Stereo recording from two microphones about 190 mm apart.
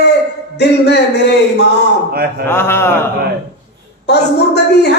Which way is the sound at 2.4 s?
10° left (ahead or behind).